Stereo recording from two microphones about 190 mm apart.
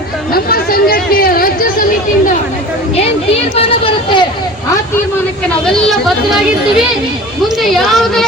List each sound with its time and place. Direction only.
0.3 s speech: 50° left (ahead or behind)
3.5 s speech: 30° left (ahead or behind)
5.9 s speech: centre (ahead or behind)